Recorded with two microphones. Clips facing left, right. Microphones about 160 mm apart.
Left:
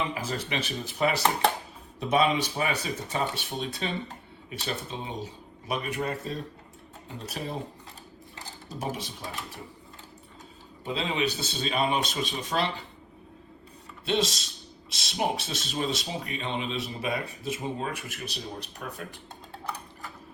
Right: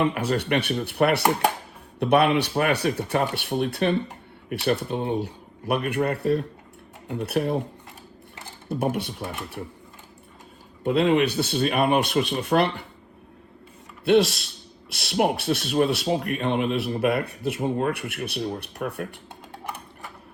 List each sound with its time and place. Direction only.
0.0 s speech: 65° right (ahead or behind)
8.7 s speech: 65° right (ahead or behind)
10.8 s speech: 60° right (ahead or behind)
14.0 s speech: 65° right (ahead or behind)